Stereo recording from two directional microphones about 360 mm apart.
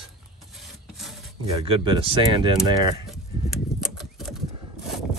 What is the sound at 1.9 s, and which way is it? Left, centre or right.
Speech, centre.